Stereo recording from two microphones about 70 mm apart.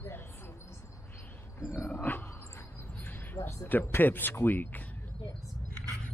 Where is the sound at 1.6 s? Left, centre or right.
Left.